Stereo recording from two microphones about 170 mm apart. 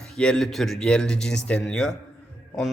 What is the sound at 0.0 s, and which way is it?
A man's voice, 5° left (ahead or behind).